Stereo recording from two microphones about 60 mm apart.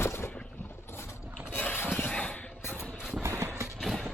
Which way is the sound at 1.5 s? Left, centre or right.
Left.